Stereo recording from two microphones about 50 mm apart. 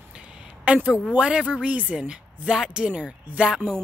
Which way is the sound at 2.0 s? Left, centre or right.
Centre.